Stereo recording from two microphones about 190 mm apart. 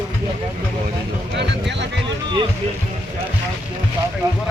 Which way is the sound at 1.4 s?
65° right (ahead or behind).